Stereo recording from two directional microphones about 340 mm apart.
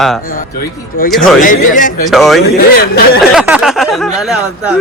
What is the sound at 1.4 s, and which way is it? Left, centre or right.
Speech, left.